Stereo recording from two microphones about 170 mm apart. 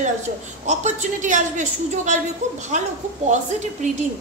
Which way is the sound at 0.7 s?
45° right (ahead or behind).